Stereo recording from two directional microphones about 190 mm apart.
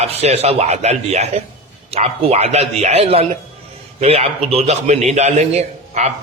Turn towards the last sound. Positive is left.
turn(degrees=-35)  # may be behind; listen again after turning